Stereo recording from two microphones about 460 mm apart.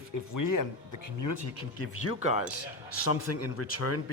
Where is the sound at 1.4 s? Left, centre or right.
Left.